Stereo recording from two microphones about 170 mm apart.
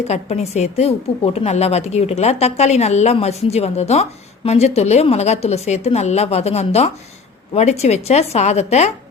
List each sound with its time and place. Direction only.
0.1 s a woman's voice: 40° left (ahead or behind)